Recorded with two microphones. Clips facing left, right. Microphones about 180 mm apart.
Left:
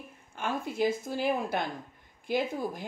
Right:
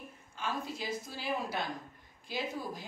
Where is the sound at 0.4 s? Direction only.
55° left (ahead or behind).